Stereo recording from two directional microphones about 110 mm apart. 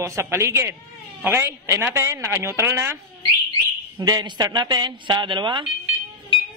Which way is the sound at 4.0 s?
40° right (ahead or behind).